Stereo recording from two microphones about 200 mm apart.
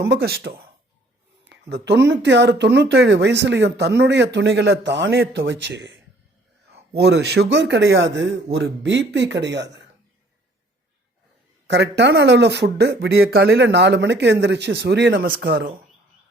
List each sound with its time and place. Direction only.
0.1 s speech: 50° right (ahead or behind)
1.5 s a sound: 60° right (ahead or behind)
2.0 s speech: 60° right (ahead or behind)
6.9 s speech: 55° right (ahead or behind)
11.7 s speech: 60° right (ahead or behind)